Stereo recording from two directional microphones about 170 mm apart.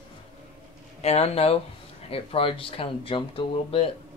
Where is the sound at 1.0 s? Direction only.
40° left (ahead or behind).